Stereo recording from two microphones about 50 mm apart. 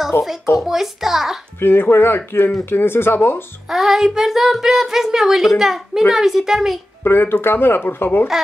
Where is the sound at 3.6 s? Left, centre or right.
Centre.